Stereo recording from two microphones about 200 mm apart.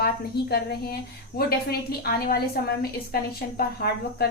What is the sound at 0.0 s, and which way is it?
A woman's voice, 50° left (ahead or behind).